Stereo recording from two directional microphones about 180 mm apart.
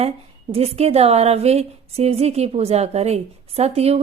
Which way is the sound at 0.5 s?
35° right (ahead or behind).